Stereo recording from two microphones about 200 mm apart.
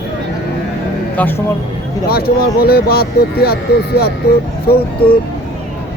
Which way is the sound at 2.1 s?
50° left (ahead or behind).